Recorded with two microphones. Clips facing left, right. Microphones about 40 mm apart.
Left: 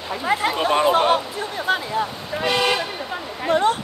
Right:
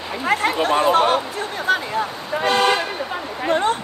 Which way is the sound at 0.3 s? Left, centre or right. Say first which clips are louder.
Right 1 dB; right.